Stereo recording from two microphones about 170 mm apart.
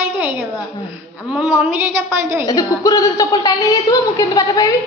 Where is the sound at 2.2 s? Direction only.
15° right (ahead or behind).